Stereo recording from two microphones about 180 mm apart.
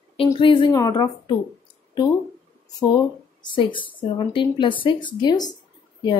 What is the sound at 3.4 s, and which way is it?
Speech, 25° left (ahead or behind).